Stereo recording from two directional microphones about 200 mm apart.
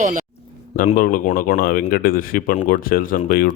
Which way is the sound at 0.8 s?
45° left (ahead or behind).